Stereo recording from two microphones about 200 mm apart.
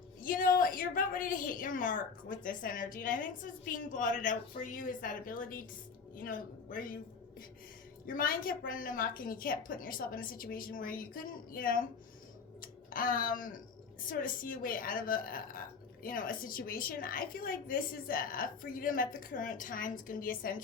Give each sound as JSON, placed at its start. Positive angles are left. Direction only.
{"t": 0.2, "sound": "a woman's voice", "side_deg": 45}
{"t": 8.0, "sound": "a woman's voice", "side_deg": 45}